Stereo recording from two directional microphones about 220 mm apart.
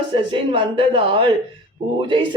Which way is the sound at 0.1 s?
25° right (ahead or behind).